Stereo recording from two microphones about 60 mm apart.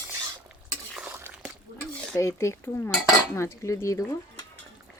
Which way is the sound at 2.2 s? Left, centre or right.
Left.